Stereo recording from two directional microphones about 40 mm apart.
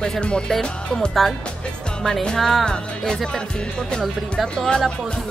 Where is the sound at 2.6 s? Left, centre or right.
Left.